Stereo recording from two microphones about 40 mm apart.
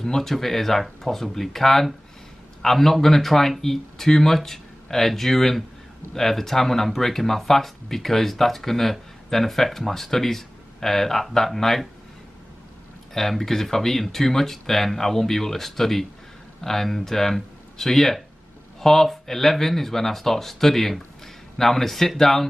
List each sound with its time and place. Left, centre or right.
0.0 s speech: centre
13.1 s speech: centre